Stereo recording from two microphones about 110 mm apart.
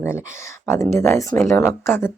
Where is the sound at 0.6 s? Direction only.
25° left (ahead or behind).